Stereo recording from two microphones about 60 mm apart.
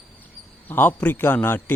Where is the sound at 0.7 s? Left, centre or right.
Left.